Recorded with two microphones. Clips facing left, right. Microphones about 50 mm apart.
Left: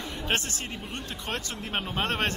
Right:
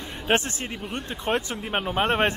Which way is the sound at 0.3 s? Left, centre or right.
Right.